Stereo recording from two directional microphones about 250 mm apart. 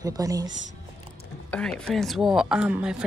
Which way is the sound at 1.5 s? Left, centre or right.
Centre.